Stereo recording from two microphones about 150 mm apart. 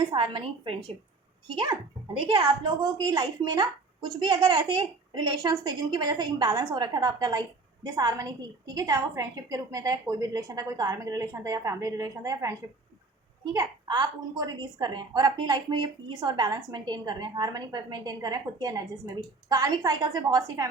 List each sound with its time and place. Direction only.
0.1 s a woman's voice: 35° right (ahead or behind)